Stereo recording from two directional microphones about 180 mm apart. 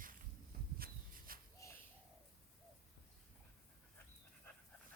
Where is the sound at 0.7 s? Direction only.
55° right (ahead or behind).